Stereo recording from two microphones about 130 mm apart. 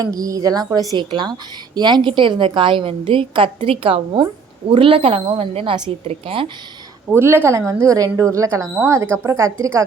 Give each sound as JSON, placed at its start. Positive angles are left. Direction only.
{"t": 0.0, "sound": "a woman's voice", "side_deg": -25}
{"t": 7.1, "sound": "a woman's voice", "side_deg": -20}